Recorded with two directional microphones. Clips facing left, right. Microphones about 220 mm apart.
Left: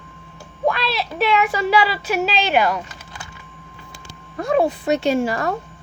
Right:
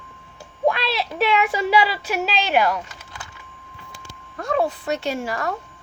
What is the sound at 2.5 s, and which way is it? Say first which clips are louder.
Speech: right 1 dB; 10° right (ahead or behind).